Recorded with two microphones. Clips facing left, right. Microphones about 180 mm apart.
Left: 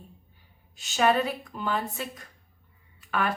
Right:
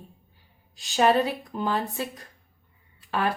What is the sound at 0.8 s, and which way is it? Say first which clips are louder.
A woman's voice: right 2 dB; 35° right (ahead or behind).